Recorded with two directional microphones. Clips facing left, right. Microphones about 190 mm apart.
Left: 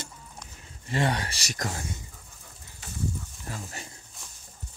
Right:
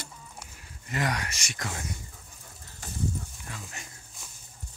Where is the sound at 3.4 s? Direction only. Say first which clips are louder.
Left 4 dB; 35° left (ahead or behind).